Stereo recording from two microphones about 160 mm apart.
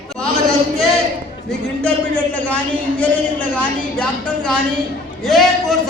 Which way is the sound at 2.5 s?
10° left (ahead or behind).